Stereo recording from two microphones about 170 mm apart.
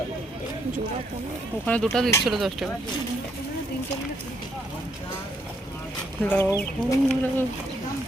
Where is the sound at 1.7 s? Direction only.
10° left (ahead or behind).